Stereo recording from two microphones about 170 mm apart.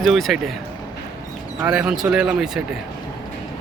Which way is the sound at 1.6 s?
5° right (ahead or behind).